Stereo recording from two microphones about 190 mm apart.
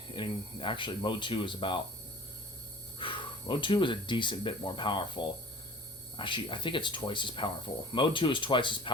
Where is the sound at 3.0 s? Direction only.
25° left (ahead or behind).